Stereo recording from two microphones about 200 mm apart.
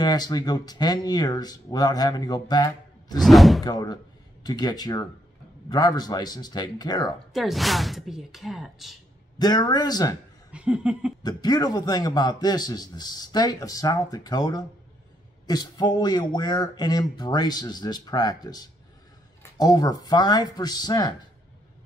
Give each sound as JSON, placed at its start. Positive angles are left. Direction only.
{"t": 0.0, "sound": "a man's voice", "side_deg": 20}
{"t": 3.2, "sound": "speech", "side_deg": 0}
{"t": 3.6, "sound": "a man's voice", "side_deg": 20}
{"t": 7.3, "sound": "speech", "side_deg": 0}
{"t": 9.4, "sound": "a man's voice", "side_deg": 20}
{"t": 10.5, "sound": "laughter", "side_deg": -5}
{"t": 11.2, "sound": "a man's voice", "side_deg": 20}